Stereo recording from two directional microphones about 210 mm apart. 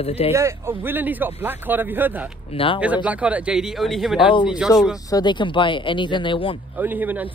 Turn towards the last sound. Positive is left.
turn(degrees=-10)  # may be behind; listen again after turning